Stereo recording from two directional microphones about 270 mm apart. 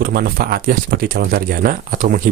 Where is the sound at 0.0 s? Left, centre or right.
Right.